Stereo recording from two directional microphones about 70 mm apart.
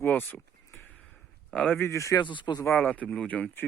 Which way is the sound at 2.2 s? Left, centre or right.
Left.